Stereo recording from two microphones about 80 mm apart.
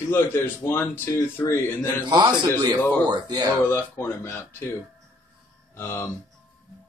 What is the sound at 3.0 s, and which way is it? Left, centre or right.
Speech, right.